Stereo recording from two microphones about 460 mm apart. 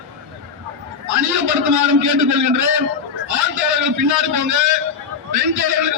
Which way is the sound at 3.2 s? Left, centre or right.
Right.